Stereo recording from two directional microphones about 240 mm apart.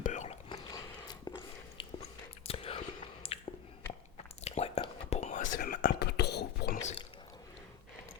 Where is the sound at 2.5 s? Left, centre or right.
Left.